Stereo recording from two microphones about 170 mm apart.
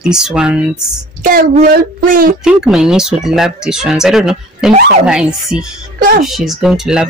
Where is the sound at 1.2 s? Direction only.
55° right (ahead or behind).